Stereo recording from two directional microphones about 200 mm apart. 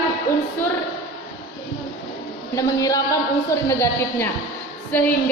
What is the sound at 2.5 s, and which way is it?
A woman's voice, 15° left (ahead or behind).